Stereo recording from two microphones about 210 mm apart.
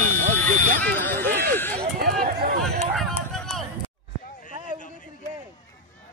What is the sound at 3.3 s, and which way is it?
Run, centre (ahead or behind).